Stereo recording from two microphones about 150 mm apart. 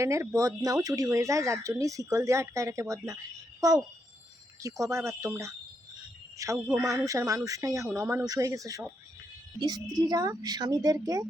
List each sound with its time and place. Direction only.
0.0 s speech: 20° right (ahead or behind)